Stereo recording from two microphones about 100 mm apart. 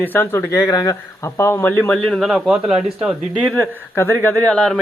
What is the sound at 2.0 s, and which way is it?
Speech, centre (ahead or behind).